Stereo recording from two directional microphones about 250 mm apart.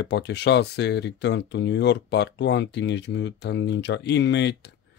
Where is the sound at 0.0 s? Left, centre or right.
Left.